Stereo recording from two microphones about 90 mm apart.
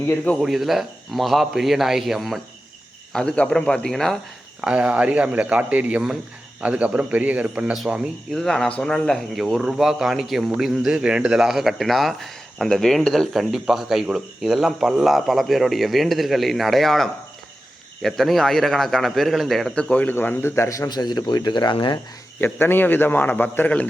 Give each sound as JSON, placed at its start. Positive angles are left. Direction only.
{"t": 0.3, "sound": "a man's voice", "side_deg": -5}
{"t": 4.6, "sound": "speech", "side_deg": -15}
{"t": 8.3, "sound": "a man's voice", "side_deg": 5}
{"t": 22.4, "sound": "a man's voice", "side_deg": 20}